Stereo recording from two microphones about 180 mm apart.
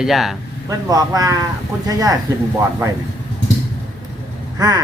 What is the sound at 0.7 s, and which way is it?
Speech, 20° right (ahead or behind).